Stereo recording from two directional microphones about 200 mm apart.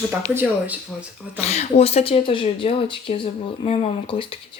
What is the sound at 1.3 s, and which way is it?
Speech, 35° left (ahead or behind).